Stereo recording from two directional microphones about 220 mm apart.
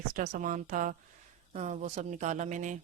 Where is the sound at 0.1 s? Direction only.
35° right (ahead or behind).